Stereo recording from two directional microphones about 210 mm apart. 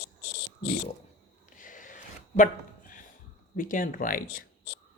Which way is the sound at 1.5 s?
40° left (ahead or behind).